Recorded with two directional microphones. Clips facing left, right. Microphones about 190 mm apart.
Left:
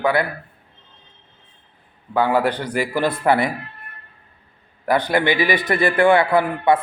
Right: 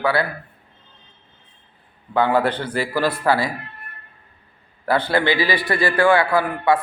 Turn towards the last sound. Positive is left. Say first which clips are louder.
# left 2 dB
turn(degrees=20)  # may be behind; listen again after turning